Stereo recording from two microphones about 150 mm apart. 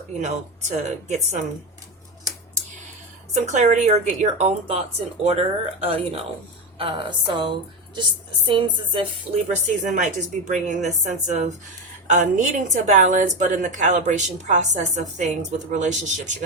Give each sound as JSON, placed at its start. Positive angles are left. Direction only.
{"t": 0.2, "sound": "a woman's voice", "side_deg": -50}
{"t": 3.3, "sound": "a woman's voice", "side_deg": -50}
{"t": 9.8, "sound": "a woman's voice", "side_deg": -55}